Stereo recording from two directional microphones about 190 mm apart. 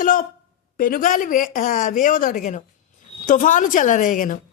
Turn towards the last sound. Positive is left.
turn(degrees=45)  # may be behind; listen again after turning